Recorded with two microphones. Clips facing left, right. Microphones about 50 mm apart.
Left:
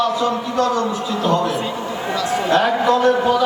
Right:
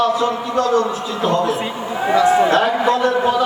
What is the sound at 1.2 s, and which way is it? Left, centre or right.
A man's voice, centre.